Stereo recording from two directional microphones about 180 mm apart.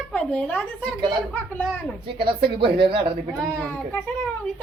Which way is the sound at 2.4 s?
65° right (ahead or behind).